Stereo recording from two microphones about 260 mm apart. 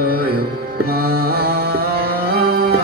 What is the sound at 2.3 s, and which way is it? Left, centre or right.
Music, right.